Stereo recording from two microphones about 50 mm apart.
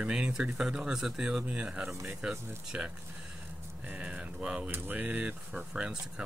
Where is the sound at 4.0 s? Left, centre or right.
Right.